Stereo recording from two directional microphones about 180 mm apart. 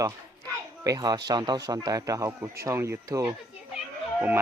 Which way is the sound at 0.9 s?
20° right (ahead or behind).